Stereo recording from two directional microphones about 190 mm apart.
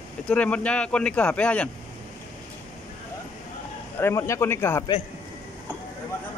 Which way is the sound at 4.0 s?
15° left (ahead or behind).